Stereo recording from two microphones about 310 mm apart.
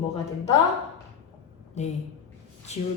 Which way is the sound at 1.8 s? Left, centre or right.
Left.